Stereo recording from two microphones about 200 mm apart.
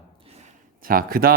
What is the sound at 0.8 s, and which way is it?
Speech, 45° right (ahead or behind).